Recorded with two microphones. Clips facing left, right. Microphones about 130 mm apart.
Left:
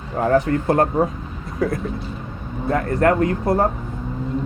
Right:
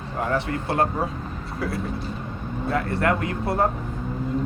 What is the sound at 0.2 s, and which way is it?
Speech, 40° left (ahead or behind).